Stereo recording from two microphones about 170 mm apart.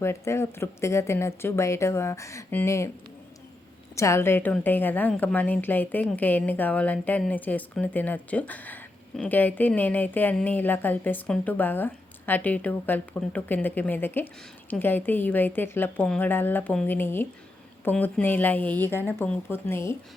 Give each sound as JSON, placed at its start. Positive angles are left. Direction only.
{"t": 0.0, "sound": "a woman's voice", "side_deg": 15}
{"t": 3.9, "sound": "a woman's voice", "side_deg": 15}